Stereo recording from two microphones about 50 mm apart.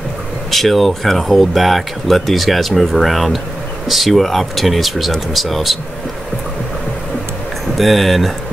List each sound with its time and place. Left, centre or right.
0.5 s speech: centre
7.7 s speech: centre